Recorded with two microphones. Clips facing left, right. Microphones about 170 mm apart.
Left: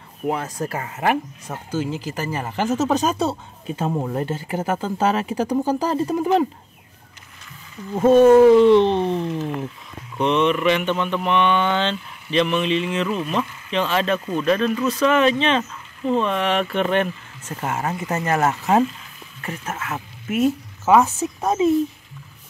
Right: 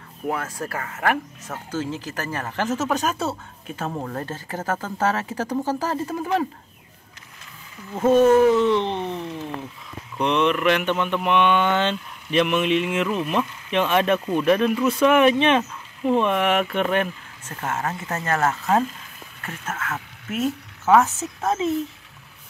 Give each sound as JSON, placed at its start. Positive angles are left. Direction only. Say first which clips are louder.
{"t": 0.3, "sound": "speech", "louder": "left 3 dB", "side_deg": 20}
{"t": 8.5, "sound": "a sound", "louder": "left 7 dB", "side_deg": 30}
{"t": 10.1, "sound": "speech", "louder": "left 2 dB", "side_deg": 5}
{"t": 17.5, "sound": "speech", "louder": "left 2 dB", "side_deg": 10}